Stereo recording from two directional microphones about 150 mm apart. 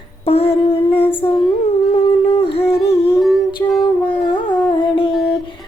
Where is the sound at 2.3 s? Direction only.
40° left (ahead or behind).